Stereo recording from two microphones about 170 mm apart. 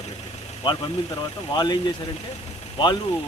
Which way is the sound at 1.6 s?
25° left (ahead or behind).